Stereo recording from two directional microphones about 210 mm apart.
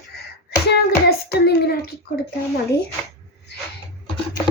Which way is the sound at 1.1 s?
50° left (ahead or behind).